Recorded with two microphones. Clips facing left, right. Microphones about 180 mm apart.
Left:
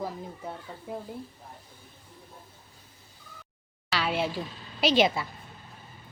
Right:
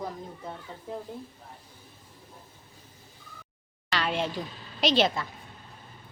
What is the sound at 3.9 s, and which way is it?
Speech, 5° left (ahead or behind).